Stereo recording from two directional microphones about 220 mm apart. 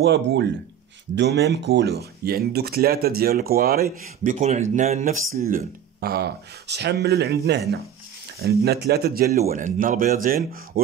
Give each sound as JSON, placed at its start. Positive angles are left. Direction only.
{"t": 0.0, "sound": "speech", "side_deg": -50}